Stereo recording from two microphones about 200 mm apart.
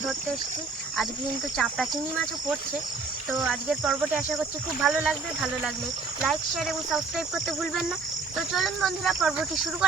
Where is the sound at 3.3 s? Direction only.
Centre (ahead or behind).